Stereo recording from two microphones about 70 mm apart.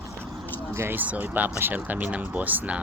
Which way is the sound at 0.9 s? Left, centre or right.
Right.